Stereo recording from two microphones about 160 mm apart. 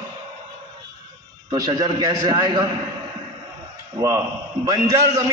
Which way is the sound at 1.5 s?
25° right (ahead or behind).